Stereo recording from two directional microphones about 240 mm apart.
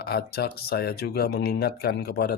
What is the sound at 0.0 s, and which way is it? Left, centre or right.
Speech, left.